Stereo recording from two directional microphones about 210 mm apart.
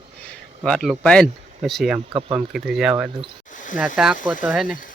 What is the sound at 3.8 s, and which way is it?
Speech, 5° right (ahead or behind).